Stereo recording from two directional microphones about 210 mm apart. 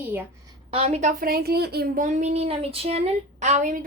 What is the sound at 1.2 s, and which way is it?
A woman's voice, 45° right (ahead or behind).